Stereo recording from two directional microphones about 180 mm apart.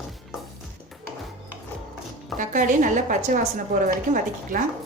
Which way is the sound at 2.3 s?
45° right (ahead or behind).